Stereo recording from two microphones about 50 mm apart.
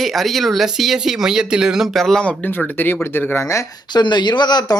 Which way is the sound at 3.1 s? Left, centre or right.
Left.